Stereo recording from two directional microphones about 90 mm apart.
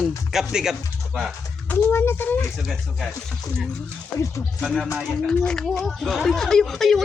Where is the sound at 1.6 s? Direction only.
25° left (ahead or behind).